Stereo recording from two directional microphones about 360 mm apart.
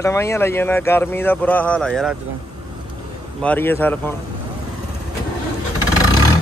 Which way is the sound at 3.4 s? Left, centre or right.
Centre.